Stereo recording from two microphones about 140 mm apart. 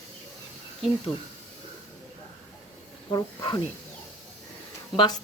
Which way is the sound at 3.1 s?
30° left (ahead or behind).